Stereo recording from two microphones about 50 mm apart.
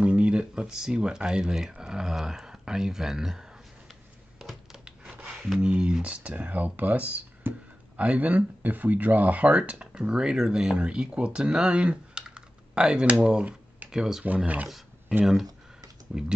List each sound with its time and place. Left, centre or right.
0.0 s speech: right
4.4 s a sound: centre
5.6 s speech: right
7.5 s speech: right
8.0 s speech: right
13.9 s speech: centre
14.2 s speech: right
16.1 s speech: centre